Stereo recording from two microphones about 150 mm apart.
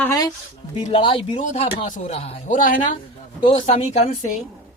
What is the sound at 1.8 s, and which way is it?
Speech, 55° left (ahead or behind).